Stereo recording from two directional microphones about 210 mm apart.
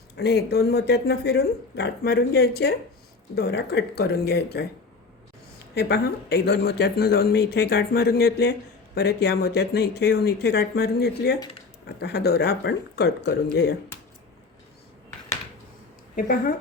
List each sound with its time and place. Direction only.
0.2 s speech: 50° left (ahead or behind)
5.7 s speech: 50° left (ahead or behind)